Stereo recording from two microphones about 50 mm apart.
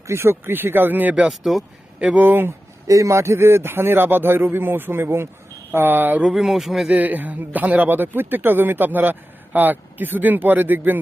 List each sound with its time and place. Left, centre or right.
0.1 s speech: right
1.3 s speech: centre
2.1 s a man's voice: right
2.5 s speech: right
5.7 s a man's voice: right
6.2 s speech: centre
6.9 s a man's voice: right